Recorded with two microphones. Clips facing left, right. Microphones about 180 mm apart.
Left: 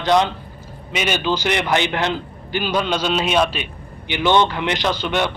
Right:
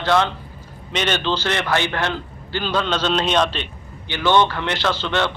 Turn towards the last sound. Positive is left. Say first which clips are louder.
# left 1 dB
turn(degrees=15)  # may be behind; listen again after turning